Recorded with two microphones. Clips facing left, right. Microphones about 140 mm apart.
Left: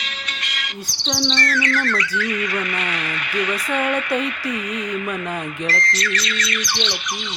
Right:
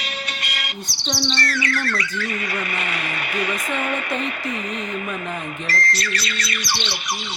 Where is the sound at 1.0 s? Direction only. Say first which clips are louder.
Left 2 dB; 10° right (ahead or behind).